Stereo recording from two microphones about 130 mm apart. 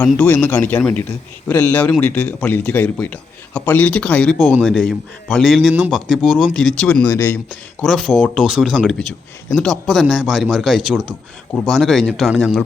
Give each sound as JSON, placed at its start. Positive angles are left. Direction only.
{"t": 0.2, "sound": "a man's voice", "side_deg": 10}
{"t": 4.4, "sound": "speech", "side_deg": 0}
{"t": 6.5, "sound": "a man's voice", "side_deg": 5}
{"t": 7.1, "sound": "speech", "side_deg": 25}
{"t": 7.8, "sound": "speech", "side_deg": 0}